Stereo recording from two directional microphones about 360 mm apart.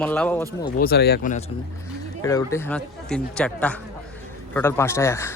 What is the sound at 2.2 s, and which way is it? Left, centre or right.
Speech, centre.